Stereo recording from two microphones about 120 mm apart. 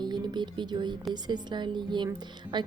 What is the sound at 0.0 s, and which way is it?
Speech, 35° right (ahead or behind).